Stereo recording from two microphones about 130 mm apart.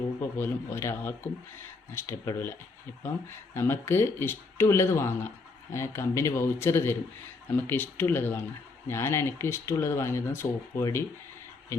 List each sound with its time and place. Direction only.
0.2 s speech: 15° left (ahead or behind)